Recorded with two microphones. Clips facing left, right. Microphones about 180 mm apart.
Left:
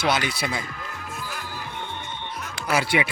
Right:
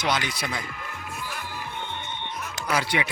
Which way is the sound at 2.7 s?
10° left (ahead or behind).